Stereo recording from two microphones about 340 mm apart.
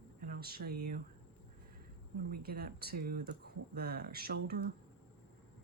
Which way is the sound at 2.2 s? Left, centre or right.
Right.